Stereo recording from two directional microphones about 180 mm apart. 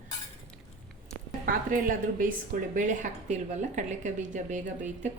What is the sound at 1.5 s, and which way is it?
A woman's voice, 50° right (ahead or behind).